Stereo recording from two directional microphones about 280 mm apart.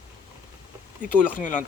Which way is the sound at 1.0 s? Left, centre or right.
Left.